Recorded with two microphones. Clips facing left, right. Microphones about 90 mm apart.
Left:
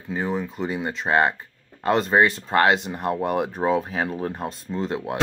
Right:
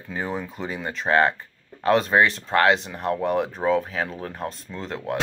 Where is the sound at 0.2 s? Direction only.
Centre (ahead or behind).